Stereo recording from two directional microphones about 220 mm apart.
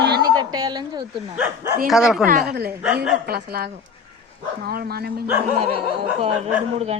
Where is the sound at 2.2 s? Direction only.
40° right (ahead or behind).